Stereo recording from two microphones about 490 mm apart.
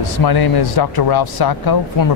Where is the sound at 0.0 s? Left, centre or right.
Left.